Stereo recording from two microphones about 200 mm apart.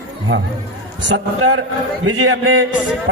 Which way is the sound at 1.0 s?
60° right (ahead or behind).